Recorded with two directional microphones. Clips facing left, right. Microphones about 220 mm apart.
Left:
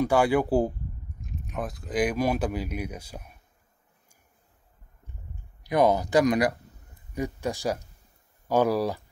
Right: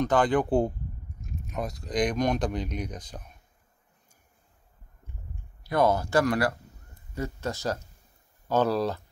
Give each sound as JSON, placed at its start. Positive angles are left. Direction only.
{"t": 0.0, "sound": "speech", "side_deg": 10}
{"t": 5.6, "sound": "speech", "side_deg": 15}